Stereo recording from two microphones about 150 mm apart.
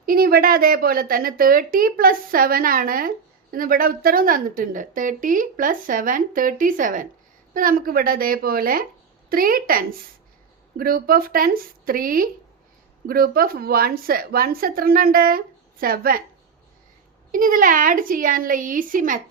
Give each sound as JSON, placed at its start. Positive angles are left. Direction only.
{"t": 0.0, "sound": "a woman's voice", "side_deg": -75}
{"t": 17.3, "sound": "a woman's voice", "side_deg": -65}